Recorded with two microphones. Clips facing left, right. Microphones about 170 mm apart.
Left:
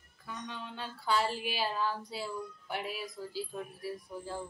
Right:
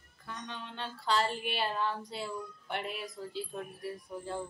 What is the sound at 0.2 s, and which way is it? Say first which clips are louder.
A child's voice: left 1 dB; 5° left (ahead or behind).